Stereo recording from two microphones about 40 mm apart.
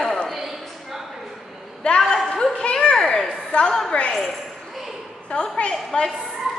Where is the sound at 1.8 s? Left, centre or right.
Left.